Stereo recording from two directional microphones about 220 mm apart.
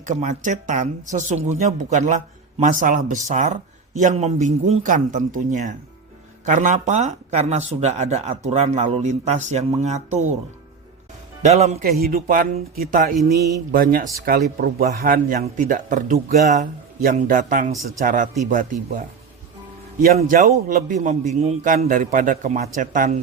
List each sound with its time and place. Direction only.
0.0 s speech: 35° right (ahead or behind)
11.4 s speech: 30° right (ahead or behind)
11.9 s speech: 40° right (ahead or behind)
20.1 s speech: 35° right (ahead or behind)